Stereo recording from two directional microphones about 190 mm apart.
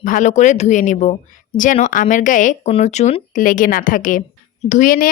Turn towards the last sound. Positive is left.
turn(degrees=45)  # may be behind; listen again after turning